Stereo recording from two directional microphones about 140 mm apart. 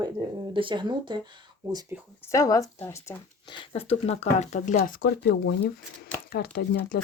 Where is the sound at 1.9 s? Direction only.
15° right (ahead or behind).